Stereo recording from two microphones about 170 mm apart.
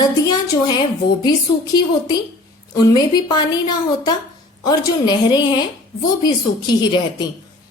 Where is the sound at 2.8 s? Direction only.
25° left (ahead or behind).